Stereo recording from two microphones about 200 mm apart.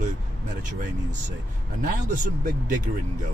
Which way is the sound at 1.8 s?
40° right (ahead or behind).